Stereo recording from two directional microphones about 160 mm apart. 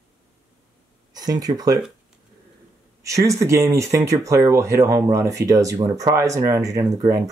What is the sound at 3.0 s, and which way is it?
Speech, 20° right (ahead or behind).